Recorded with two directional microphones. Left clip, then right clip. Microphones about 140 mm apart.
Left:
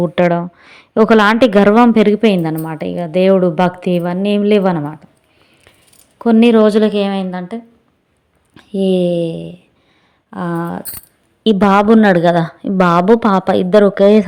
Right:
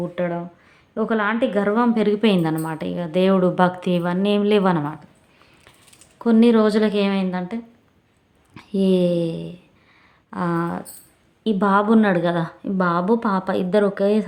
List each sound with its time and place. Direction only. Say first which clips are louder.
0.0 s a woman's voice: left 11 dB; 70° left (ahead or behind); by 5.7 s 30° left (ahead or behind)
6.1 s a woman's voice: left 6 dB; 45° left (ahead or behind); by 7.6 s 30° left (ahead or behind)
8.5 s speech: left 5 dB; 20° left (ahead or behind)
11.4 s a woman's voice: left 8 dB; 50° left (ahead or behind)